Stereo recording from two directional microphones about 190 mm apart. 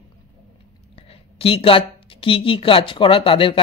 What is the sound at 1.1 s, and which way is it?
A woman's voice, 30° left (ahead or behind).